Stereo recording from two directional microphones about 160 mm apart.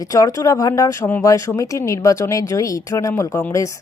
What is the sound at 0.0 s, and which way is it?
Speech, 20° left (ahead or behind).